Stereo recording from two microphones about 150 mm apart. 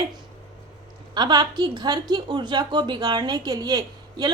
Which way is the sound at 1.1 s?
30° right (ahead or behind).